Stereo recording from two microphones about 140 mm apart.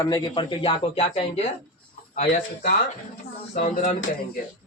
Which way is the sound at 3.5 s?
65° left (ahead or behind).